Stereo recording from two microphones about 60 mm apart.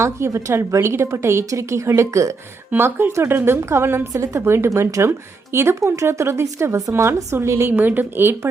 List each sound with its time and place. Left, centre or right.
0.0 s a woman's voice: right
2.7 s a woman's voice: right
4.1 s a woman's voice: right
7.7 s a woman's voice: right